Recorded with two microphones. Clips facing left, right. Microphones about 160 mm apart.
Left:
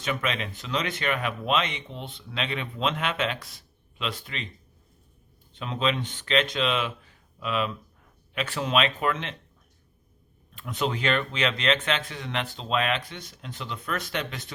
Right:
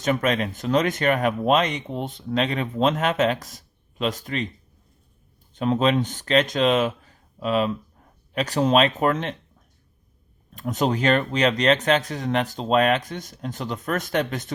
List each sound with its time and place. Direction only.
0.0 s speech: 45° right (ahead or behind)
5.5 s speech: 45° right (ahead or behind)
10.5 s speech: 40° right (ahead or behind)